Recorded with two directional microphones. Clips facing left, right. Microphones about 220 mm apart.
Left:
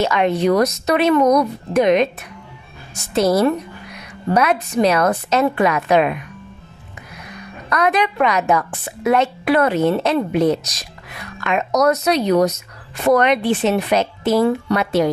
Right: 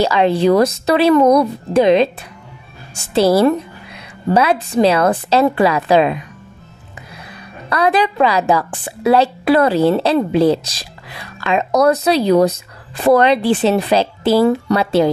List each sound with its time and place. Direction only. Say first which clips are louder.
0.0 s a woman's voice: right 3 dB; 30° right (ahead or behind)